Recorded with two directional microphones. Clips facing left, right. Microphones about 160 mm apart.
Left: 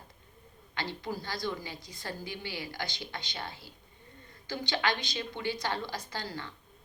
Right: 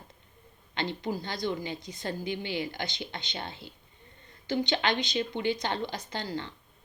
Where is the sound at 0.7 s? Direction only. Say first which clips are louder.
Right 4 dB; 20° right (ahead or behind).